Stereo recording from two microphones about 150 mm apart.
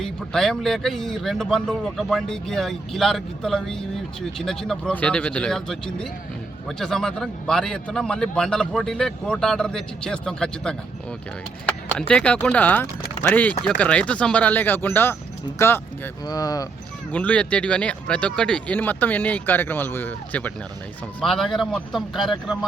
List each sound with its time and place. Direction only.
0.0 s speech: 5° left (ahead or behind); by 16.6 s 25° left (ahead or behind)
17.1 s speech: 10° left (ahead or behind)